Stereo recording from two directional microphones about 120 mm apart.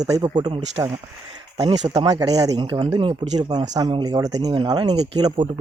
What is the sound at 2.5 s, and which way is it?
Speech, 45° right (ahead or behind).